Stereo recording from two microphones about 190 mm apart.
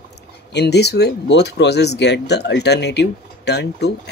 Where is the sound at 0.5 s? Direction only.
60° left (ahead or behind).